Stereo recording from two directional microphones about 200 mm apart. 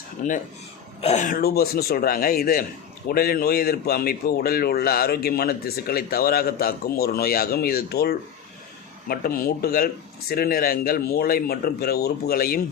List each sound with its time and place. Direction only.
0.2 s speech: 35° left (ahead or behind)